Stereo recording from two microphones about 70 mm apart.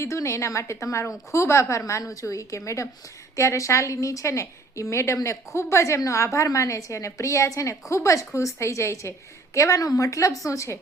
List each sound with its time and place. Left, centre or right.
0.0 s a woman's voice: left